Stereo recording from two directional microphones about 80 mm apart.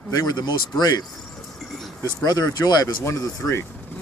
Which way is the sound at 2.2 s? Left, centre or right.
Left.